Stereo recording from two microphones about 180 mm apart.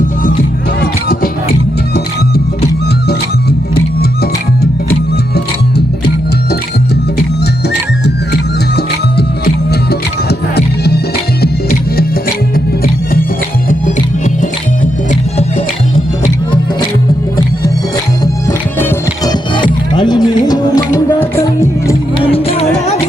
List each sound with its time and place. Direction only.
0.8 s music: 55° left (ahead or behind)
3.8 s music: 60° left (ahead or behind)
8.0 s music: 65° left (ahead or behind)
18.8 s music: 15° left (ahead or behind)
22.2 s music: 30° left (ahead or behind)